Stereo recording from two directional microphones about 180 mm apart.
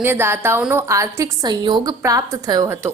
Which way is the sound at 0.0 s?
10° right (ahead or behind).